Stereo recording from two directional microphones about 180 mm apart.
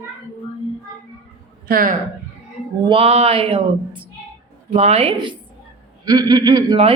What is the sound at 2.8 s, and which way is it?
Speech, 30° right (ahead or behind).